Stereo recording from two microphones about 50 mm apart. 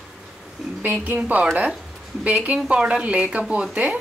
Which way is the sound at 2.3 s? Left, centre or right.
Right.